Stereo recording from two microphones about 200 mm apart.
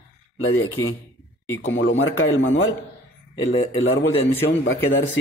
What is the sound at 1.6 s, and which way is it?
Speech, 70° left (ahead or behind).